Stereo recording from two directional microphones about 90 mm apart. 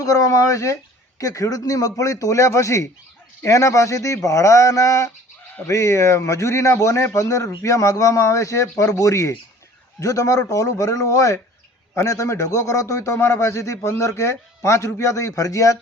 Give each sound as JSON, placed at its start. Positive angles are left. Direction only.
{"t": 0.0, "sound": "a man's voice", "side_deg": 40}